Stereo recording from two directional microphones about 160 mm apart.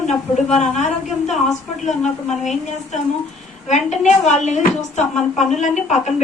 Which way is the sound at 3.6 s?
45° left (ahead or behind).